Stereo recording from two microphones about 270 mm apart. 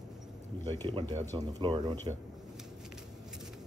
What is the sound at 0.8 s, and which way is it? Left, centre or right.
Speech, centre.